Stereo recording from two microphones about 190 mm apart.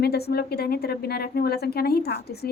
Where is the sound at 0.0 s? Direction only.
55° left (ahead or behind).